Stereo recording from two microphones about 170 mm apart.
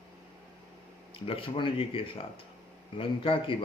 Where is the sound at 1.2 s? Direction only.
30° left (ahead or behind).